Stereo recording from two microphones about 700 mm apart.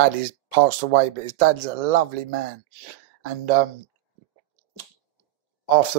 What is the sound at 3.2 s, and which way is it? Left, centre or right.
Speech, right.